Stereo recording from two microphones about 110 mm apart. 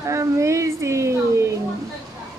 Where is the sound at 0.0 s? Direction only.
25° right (ahead or behind).